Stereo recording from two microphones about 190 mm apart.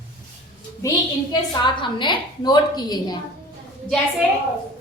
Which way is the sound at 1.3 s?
25° left (ahead or behind).